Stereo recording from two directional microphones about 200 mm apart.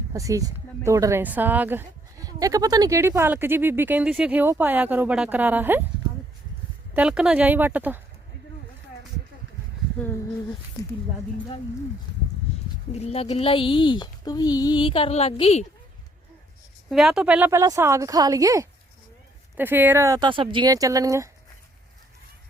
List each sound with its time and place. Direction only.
0.1 s speech: 15° right (ahead or behind)
6.9 s speech: 5° right (ahead or behind)
12.9 s speech: 30° left (ahead or behind)
16.9 s speech: centre (ahead or behind)